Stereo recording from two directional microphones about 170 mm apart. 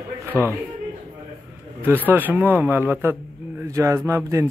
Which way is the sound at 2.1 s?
10° right (ahead or behind).